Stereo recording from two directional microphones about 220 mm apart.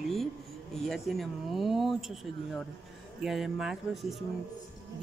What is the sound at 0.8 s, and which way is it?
Speech, centre (ahead or behind).